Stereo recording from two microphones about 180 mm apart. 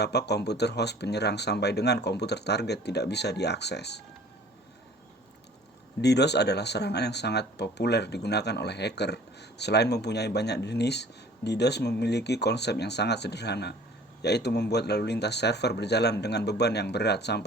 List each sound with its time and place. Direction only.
0.0 s speech: 70° left (ahead or behind)
6.0 s speech: 70° left (ahead or behind)